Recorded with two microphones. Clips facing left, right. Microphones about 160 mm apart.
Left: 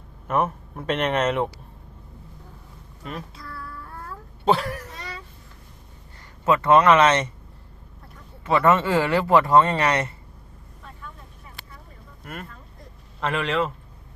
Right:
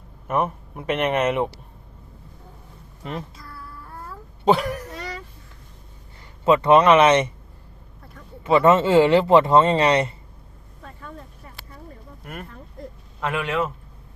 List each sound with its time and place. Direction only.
0.3 s speech: 10° right (ahead or behind)
3.0 s a woman's voice: 25° right (ahead or behind)
4.4 s speech: 20° right (ahead or behind)
6.4 s speech: 20° right (ahead or behind)
8.4 s speech: 20° right (ahead or behind)
12.2 s speech: 15° right (ahead or behind)